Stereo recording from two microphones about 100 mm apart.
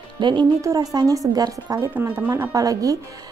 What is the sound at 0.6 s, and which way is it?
A woman's voice, 35° right (ahead or behind).